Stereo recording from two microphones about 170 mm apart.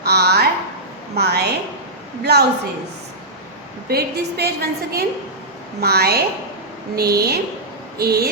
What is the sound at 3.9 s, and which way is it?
A woman's voice, 65° right (ahead or behind).